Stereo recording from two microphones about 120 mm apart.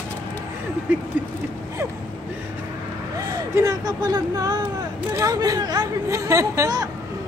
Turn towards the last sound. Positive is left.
turn(degrees=-30)  # may be behind; listen again after turning